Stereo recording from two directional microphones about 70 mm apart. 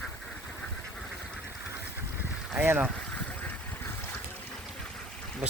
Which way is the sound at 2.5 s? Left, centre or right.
Right.